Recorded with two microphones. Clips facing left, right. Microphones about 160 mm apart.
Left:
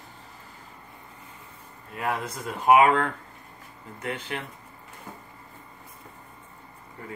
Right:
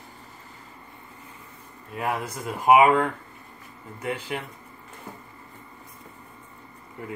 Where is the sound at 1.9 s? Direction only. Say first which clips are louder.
Right 1 dB; 10° right (ahead or behind).